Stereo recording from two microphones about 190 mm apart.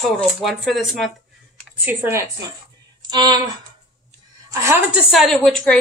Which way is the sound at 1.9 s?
15° right (ahead or behind).